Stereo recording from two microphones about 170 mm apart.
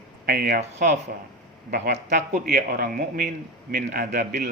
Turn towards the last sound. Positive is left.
turn(degrees=-60)  # may be behind; listen again after turning